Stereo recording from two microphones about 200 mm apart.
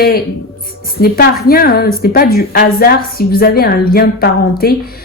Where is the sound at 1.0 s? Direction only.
50° left (ahead or behind).